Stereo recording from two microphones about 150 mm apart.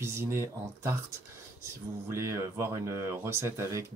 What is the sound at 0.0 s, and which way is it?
Speech, 15° right (ahead or behind).